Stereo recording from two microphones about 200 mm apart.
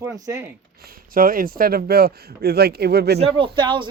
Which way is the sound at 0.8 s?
45° right (ahead or behind).